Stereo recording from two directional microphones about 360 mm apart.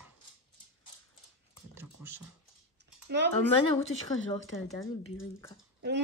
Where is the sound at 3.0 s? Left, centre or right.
Right.